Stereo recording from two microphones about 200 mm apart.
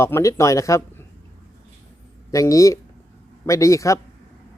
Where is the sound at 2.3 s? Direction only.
15° left (ahead or behind).